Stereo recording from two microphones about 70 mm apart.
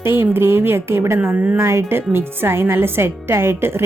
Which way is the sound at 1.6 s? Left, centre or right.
Right.